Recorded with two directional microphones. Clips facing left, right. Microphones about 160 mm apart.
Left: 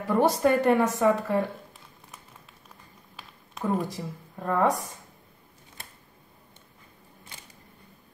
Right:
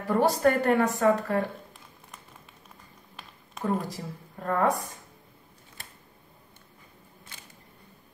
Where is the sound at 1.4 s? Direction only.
Centre (ahead or behind).